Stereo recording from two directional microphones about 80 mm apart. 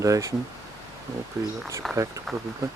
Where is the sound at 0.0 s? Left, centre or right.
Right.